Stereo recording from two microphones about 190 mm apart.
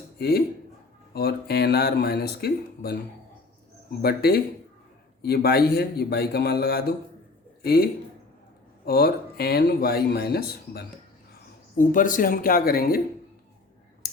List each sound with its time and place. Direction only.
0.2 s speech: 55° left (ahead or behind)
4.0 s a man's voice: 55° left (ahead or behind)
11.8 s speech: 45° left (ahead or behind)